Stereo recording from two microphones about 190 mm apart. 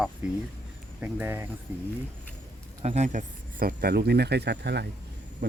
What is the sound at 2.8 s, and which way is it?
Speech, 35° right (ahead or behind).